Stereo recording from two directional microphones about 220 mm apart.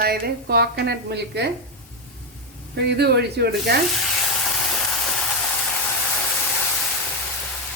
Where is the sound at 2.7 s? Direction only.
50° right (ahead or behind).